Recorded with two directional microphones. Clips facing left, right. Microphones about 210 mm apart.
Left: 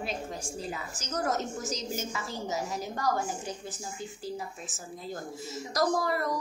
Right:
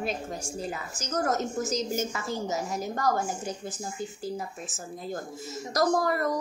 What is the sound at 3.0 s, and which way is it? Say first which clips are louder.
Speech: right 2 dB; 45° right (ahead or behind).